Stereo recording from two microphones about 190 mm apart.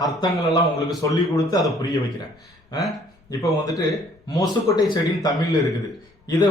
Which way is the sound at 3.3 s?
15° left (ahead or behind).